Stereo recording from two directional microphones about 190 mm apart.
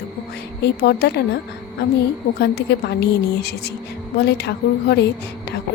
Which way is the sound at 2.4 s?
60° left (ahead or behind).